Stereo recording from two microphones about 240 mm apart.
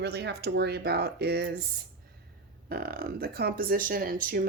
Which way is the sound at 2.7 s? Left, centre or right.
Right.